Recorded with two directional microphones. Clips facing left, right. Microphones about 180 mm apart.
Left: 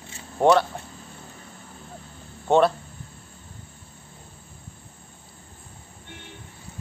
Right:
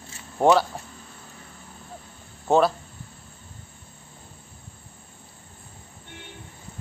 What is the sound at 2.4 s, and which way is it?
Speech, centre (ahead or behind).